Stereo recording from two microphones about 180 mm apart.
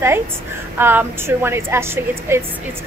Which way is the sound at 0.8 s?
10° right (ahead or behind).